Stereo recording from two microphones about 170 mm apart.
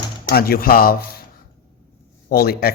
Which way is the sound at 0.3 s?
65° left (ahead or behind).